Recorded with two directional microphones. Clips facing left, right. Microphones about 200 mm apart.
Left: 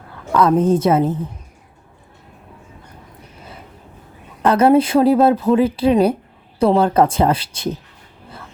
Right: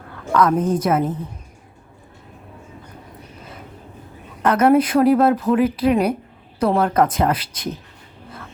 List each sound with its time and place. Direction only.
0.3 s a woman's voice: 30° left (ahead or behind)
4.4 s a woman's voice: 30° left (ahead or behind)